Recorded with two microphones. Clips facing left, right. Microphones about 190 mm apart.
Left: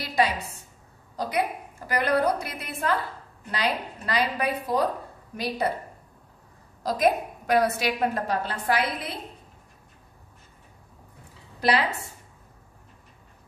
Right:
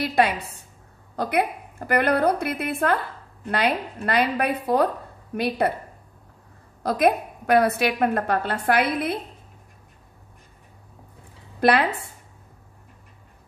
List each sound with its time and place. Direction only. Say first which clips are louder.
0.0 s a woman's voice: right 4 dB; 60° right (ahead or behind)
6.8 s a woman's voice: right 3 dB; 60° right (ahead or behind)